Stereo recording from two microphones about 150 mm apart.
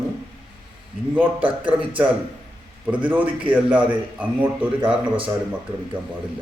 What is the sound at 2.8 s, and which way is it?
A man's voice, 10° right (ahead or behind).